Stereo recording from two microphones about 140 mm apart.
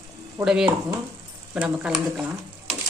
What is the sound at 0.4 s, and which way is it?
Speech, 25° right (ahead or behind).